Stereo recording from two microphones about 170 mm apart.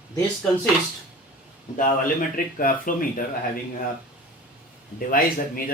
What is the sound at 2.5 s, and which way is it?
Speech, 55° left (ahead or behind).